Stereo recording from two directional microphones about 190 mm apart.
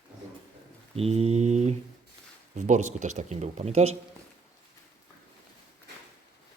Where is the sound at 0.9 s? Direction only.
35° right (ahead or behind).